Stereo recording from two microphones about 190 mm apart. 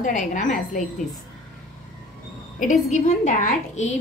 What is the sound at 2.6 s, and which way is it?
A woman's voice, 40° left (ahead or behind).